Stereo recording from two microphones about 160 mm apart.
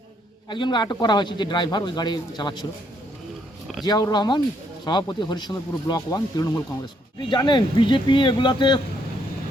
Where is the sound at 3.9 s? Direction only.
25° left (ahead or behind).